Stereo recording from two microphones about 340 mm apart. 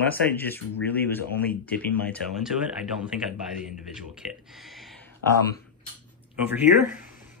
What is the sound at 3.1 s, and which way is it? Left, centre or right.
Speech, centre.